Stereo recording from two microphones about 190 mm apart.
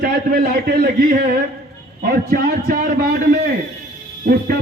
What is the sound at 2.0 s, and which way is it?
A man's voice, 55° right (ahead or behind).